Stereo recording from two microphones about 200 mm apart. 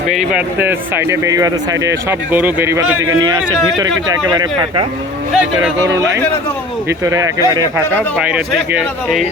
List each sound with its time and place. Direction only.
0.1 s speech: 5° right (ahead or behind)
4.3 s speech: 25° right (ahead or behind)
8.3 s a man's voice: 5° right (ahead or behind)